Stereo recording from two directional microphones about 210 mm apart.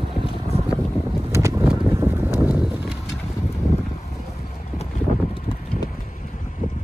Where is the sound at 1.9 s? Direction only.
10° right (ahead or behind).